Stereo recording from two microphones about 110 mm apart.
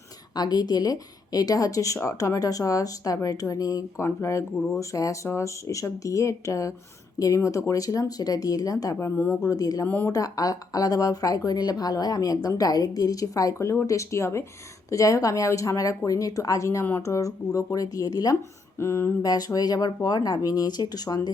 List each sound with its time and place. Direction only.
0.3 s speech: 40° left (ahead or behind)
9.0 s speech: 20° left (ahead or behind)
9.8 s speech: 15° left (ahead or behind)
10.1 s speech: 35° left (ahead or behind)
18.8 s speech: 20° left (ahead or behind)
19.2 s speech: 35° left (ahead or behind)